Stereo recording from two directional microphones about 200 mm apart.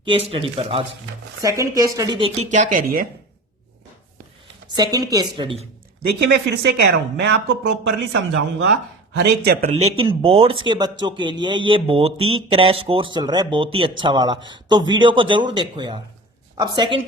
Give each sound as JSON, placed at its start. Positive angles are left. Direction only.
{"t": 0.3, "sound": "speech", "side_deg": -30}
{"t": 1.4, "sound": "speech", "side_deg": -15}
{"t": 2.5, "sound": "speech", "side_deg": -40}
{"t": 4.8, "sound": "speech", "side_deg": -20}
{"t": 6.0, "sound": "a man's voice", "side_deg": -55}
{"t": 9.1, "sound": "speech", "side_deg": -55}
{"t": 9.6, "sound": "speech", "side_deg": -30}